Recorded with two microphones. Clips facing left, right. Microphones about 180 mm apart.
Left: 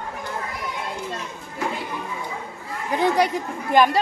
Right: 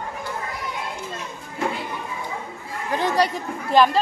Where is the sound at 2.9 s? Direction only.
15° left (ahead or behind).